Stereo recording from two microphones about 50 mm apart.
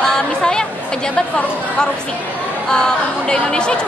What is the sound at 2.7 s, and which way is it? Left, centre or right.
A woman's voice, centre.